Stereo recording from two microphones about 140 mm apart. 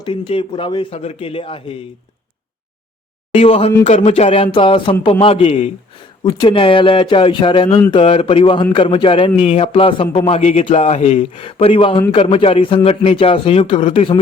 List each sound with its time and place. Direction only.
0.0 s a man's voice: 40° left (ahead or behind)
3.4 s a sound: 45° left (ahead or behind)
5.2 s a man's voice: 45° left (ahead or behind)